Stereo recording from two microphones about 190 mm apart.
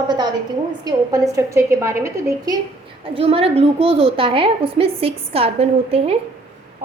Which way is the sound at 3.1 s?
30° right (ahead or behind).